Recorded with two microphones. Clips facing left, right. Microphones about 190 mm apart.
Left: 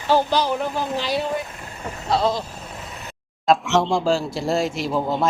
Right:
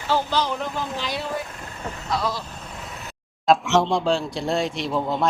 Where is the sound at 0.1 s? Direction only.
15° left (ahead or behind).